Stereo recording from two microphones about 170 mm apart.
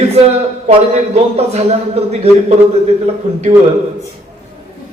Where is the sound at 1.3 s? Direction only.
35° right (ahead or behind).